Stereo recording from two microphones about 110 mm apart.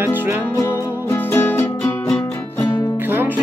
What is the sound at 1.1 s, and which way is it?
Music, 20° left (ahead or behind).